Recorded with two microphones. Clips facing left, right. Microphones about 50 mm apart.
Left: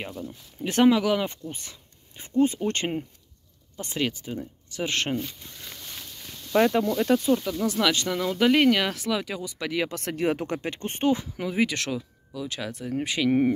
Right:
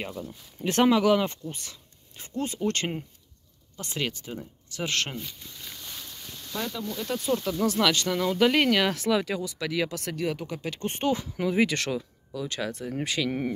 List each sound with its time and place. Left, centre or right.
0.3 s speech: centre
1.5 s speech: centre
4.7 s speech: centre
6.5 s speech: left
6.9 s speech: left
7.6 s speech: centre
9.4 s speech: centre
9.8 s speech: left
10.3 s speech: left
10.7 s speech: left
11.3 s speech: centre
13.0 s speech: centre